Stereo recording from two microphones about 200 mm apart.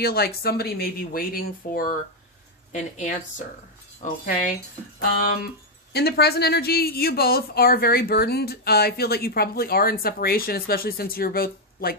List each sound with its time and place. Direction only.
0.0 s a woman's voice: 50° left (ahead or behind)